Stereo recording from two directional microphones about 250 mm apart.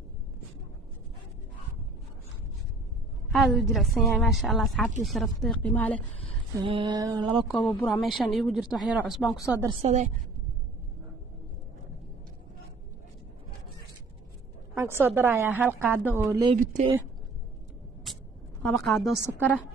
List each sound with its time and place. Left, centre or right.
3.3 s speech: centre
6.6 s mantra: centre
7.4 s speech: centre
9.7 s mantra: right
14.7 s a woman's voice: centre
16.5 s mantra: right
18.6 s speech: centre